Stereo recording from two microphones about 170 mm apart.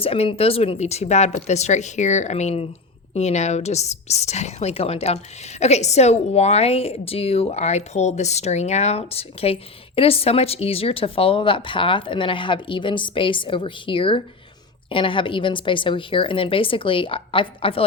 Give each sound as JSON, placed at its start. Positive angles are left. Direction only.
{"t": 0.0, "sound": "a woman's voice", "side_deg": 35}